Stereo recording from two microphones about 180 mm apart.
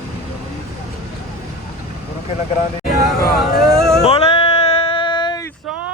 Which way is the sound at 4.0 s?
35° left (ahead or behind).